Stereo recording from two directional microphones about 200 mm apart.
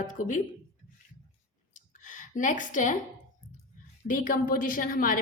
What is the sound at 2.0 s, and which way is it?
Speech, 40° left (ahead or behind).